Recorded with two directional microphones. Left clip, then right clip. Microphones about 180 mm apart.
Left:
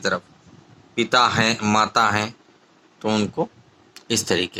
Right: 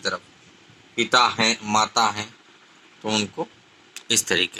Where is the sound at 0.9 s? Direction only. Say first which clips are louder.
Left 1 dB; 55° left (ahead or behind).